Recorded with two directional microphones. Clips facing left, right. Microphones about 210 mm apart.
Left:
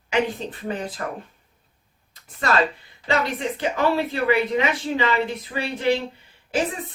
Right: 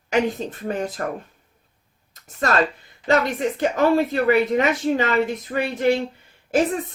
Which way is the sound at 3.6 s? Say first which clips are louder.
Right 4 dB; 45° right (ahead or behind).